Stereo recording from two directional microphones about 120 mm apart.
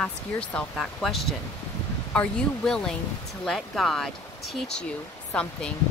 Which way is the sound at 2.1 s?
5° left (ahead or behind).